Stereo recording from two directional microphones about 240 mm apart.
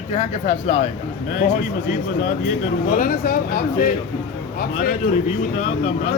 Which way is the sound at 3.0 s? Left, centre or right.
Left.